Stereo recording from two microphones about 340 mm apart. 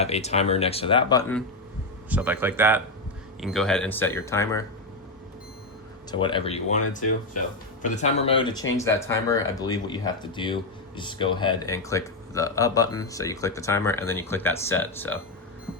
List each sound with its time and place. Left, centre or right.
0.0 s speech: centre
2.0 s speech: centre
6.1 s speech: centre
7.9 s speech: centre